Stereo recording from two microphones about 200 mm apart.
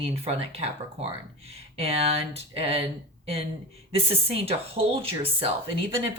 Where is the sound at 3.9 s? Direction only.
30° right (ahead or behind).